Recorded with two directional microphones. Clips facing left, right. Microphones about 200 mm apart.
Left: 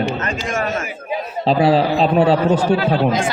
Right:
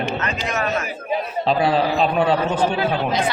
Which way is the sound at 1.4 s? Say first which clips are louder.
Left 5 dB; 35° left (ahead or behind).